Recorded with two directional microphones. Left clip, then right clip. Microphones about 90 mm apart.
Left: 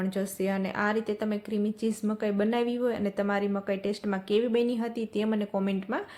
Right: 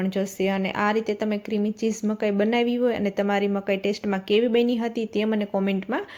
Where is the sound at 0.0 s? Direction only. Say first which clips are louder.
Right 5 dB; 25° right (ahead or behind).